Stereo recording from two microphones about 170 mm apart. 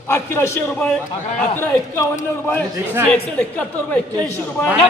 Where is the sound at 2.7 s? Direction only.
15° right (ahead or behind).